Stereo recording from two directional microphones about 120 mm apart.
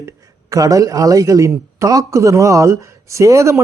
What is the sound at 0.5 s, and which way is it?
Speech, 30° right (ahead or behind).